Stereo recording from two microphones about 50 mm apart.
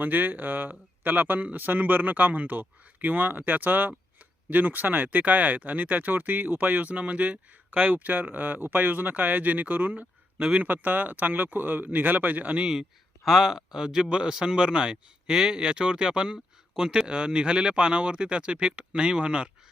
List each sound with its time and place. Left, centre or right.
0.0 s speech: right
12.5 s a man's voice: centre